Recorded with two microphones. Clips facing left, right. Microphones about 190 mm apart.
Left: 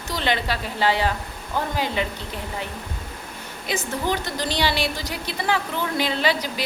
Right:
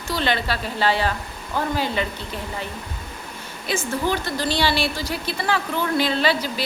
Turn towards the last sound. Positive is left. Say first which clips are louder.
# right 2 dB
turn(degrees=15)  # may be behind; listen again after turning